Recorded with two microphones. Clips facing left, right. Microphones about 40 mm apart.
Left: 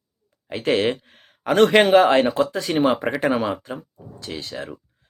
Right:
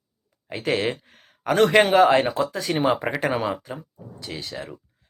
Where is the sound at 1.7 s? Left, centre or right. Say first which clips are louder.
Even; centre.